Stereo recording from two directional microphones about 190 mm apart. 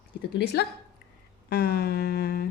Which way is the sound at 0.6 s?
60° left (ahead or behind).